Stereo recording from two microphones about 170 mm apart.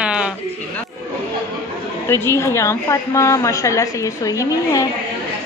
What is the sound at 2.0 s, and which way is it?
A woman's voice, 15° left (ahead or behind).